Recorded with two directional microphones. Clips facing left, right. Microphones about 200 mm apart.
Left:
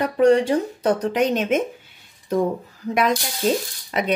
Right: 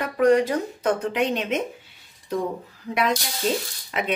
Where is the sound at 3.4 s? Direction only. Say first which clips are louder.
Left 4 dB; 45° left (ahead or behind).